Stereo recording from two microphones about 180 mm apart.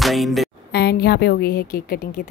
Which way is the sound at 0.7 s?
65° left (ahead or behind).